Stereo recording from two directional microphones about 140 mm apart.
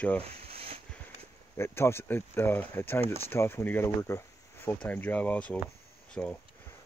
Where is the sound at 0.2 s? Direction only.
45° right (ahead or behind).